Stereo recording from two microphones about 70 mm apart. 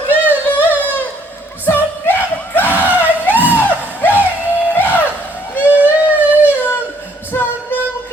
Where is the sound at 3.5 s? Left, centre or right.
Left.